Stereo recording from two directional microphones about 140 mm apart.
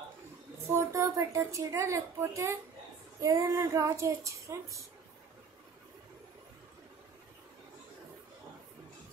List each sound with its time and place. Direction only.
0.7 s a child's voice: 20° right (ahead or behind)